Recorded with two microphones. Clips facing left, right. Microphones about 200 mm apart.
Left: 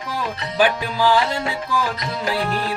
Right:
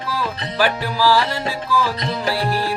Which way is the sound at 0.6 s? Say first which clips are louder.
Left 1 dB; 20° left (ahead or behind).